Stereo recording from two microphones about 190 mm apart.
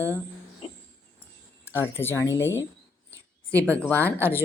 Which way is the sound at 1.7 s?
15° left (ahead or behind).